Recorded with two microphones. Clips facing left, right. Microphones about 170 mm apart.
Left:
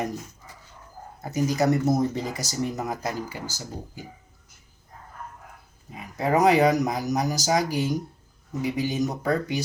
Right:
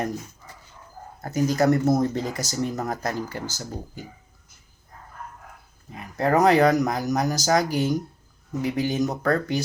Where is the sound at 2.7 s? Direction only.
10° left (ahead or behind).